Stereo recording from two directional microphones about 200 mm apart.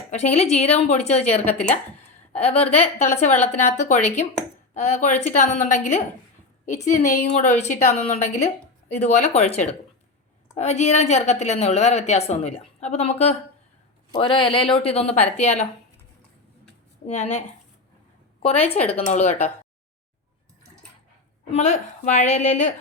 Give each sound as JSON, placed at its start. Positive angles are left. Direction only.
{"t": 0.1, "sound": "a woman's voice", "side_deg": 35}
{"t": 17.1, "sound": "a woman's voice", "side_deg": 35}
{"t": 18.4, "sound": "a woman's voice", "side_deg": 30}
{"t": 21.5, "sound": "a woman's voice", "side_deg": 35}